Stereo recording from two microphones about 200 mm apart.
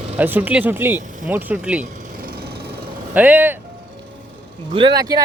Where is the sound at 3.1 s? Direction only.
10° right (ahead or behind).